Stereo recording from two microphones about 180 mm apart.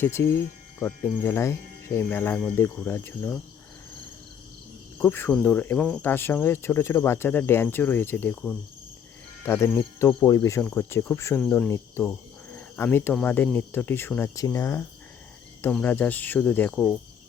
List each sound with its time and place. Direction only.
0.0 s speech: 15° left (ahead or behind)
4.9 s speech: 10° left (ahead or behind)